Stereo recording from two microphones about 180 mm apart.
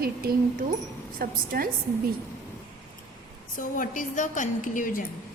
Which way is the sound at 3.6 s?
50° left (ahead or behind).